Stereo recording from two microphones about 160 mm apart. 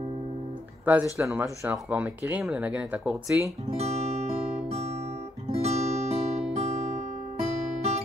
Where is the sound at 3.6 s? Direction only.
40° right (ahead or behind).